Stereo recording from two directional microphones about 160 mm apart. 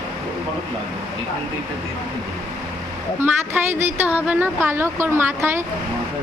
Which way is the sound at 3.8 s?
10° right (ahead or behind).